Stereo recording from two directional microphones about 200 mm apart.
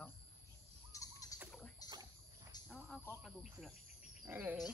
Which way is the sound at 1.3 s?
15° left (ahead or behind).